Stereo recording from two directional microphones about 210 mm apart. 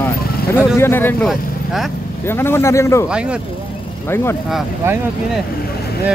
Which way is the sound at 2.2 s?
10° left (ahead or behind).